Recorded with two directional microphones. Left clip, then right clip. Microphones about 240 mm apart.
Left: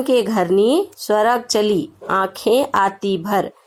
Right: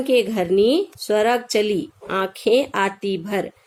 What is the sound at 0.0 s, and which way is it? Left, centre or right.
A woman's voice, left.